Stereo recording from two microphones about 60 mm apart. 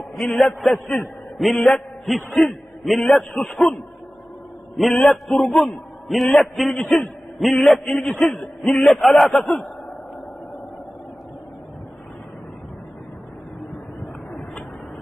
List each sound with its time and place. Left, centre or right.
0.2 s a man's voice: centre
4.9 s a man's voice: centre
5.5 s a man's voice: centre
8.9 s a man's voice: centre